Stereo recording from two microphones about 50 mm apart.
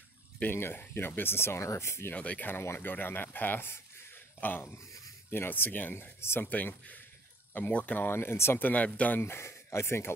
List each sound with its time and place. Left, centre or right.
0.5 s speech: left
2.1 s speech: left
2.8 s speech: left
8.1 s speech: left
8.5 s speech: left
9.2 s speech: left